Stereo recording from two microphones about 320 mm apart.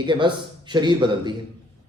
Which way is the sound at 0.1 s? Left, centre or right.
Centre.